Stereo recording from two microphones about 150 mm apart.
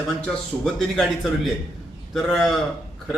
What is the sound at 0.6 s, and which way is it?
A man's voice, centre (ahead or behind).